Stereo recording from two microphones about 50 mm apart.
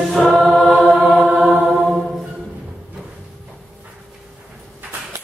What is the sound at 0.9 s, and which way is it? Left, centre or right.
Music, centre.